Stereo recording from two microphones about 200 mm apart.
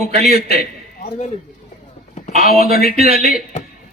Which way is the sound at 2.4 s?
50° left (ahead or behind).